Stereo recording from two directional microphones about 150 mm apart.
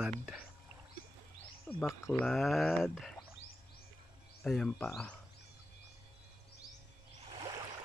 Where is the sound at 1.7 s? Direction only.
10° left (ahead or behind).